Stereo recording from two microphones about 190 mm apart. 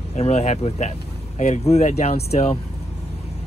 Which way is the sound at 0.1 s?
35° left (ahead or behind).